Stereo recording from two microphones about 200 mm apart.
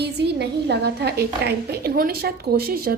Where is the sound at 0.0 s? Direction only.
55° right (ahead or behind).